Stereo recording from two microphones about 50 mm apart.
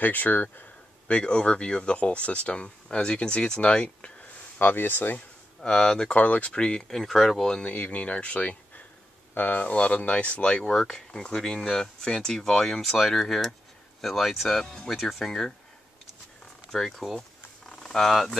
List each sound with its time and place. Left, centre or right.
0.0 s speech: left
1.0 s speech: left
4.6 s speech: left
5.6 s speech: centre
6.1 s speech: left
6.9 s speech: centre
7.6 s speech: left; by 15.5 s centre
16.7 s speech: centre
17.6 s a sound: centre